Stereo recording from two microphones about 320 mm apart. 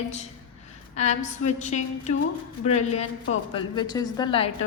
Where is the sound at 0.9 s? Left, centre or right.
Left.